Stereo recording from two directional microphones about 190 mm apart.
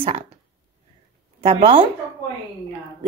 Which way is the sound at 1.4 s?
25° right (ahead or behind).